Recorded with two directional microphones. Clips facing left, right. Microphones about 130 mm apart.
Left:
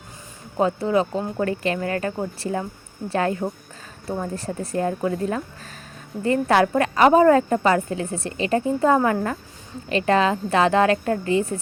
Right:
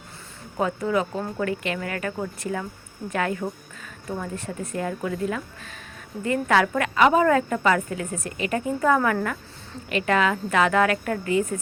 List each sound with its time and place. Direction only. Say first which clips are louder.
0.6 s speech: left 4 dB; 30° left (ahead or behind)